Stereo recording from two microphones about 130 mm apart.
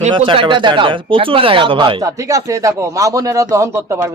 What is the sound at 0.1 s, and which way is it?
Speech, 40° right (ahead or behind).